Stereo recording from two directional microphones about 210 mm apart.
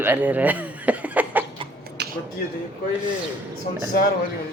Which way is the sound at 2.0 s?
50° right (ahead or behind).